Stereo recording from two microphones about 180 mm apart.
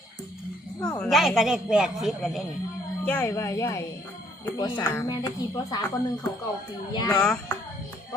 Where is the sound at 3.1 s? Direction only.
10° left (ahead or behind).